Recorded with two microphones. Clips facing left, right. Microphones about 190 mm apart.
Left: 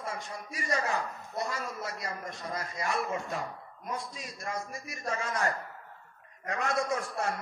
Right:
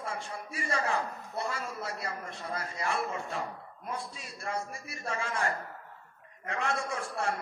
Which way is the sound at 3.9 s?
40° left (ahead or behind).